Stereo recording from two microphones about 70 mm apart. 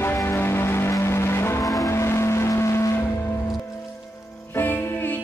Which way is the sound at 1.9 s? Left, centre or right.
Left.